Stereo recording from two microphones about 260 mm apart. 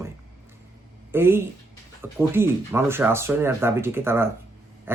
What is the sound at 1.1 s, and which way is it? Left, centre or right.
Speech, centre.